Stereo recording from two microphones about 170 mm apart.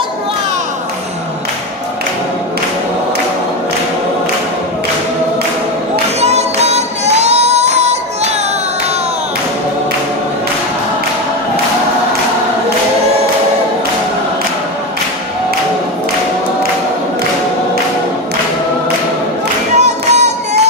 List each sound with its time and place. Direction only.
6.1 s music: 40° right (ahead or behind)
19.7 s music: 40° right (ahead or behind)